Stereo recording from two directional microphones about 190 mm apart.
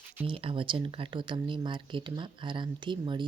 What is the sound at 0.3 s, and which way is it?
Speech, 30° right (ahead or behind).